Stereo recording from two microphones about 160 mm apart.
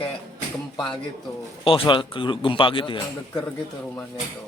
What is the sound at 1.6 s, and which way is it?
A man's voice, 35° left (ahead or behind).